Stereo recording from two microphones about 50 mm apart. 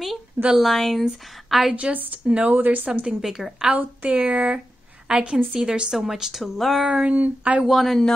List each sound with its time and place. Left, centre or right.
0.6 s a woman's voice: centre
1.8 s speech: right
2.5 s a woman's voice: right
2.9 s speech: right
3.2 s speech: centre
3.7 s a woman's voice: right; by 6.9 s centre
7.1 s speech: right
7.6 s speech: centre